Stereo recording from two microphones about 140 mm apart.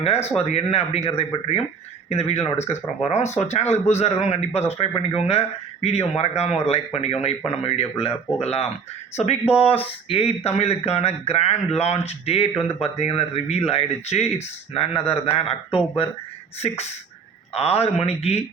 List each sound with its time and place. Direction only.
0.0 s speech: 50° left (ahead or behind)
2.0 s speech: 50° left (ahead or behind)